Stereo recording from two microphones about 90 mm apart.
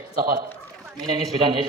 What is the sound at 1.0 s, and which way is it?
Speech, 60° right (ahead or behind).